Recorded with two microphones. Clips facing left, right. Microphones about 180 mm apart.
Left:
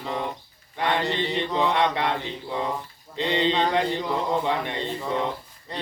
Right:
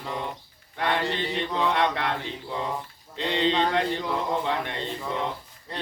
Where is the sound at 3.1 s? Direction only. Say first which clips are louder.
Left 1 dB; centre (ahead or behind).